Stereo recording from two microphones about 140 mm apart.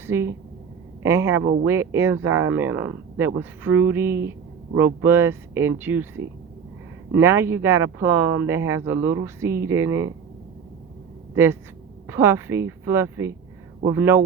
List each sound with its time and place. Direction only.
0.1 s a woman's voice: 15° right (ahead or behind)
12.0 s a woman's voice: 20° right (ahead or behind)